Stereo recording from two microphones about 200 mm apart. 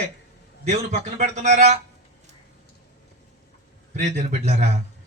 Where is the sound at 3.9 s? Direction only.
35° right (ahead or behind).